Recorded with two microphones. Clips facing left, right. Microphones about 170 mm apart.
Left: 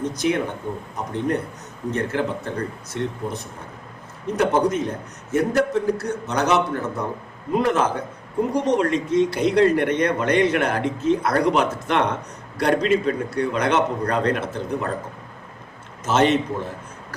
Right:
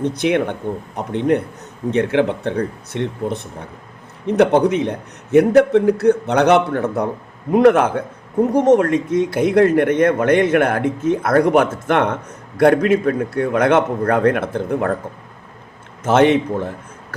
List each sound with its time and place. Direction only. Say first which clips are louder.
0.0 s a man's voice: right 5 dB; 60° right (ahead or behind)
16.0 s a man's voice: right 5 dB; 55° right (ahead or behind)